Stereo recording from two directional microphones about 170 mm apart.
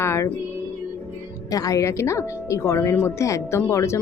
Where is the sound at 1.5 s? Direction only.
20° left (ahead or behind).